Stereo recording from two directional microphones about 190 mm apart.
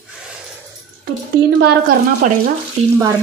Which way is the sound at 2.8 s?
35° right (ahead or behind).